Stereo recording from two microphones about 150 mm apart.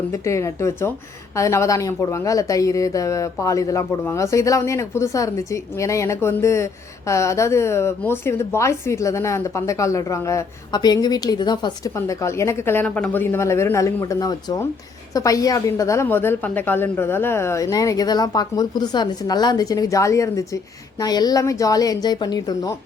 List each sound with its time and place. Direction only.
0.1 s a woman's voice: 20° left (ahead or behind)